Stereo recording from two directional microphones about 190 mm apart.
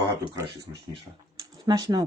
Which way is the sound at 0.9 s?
20° right (ahead or behind).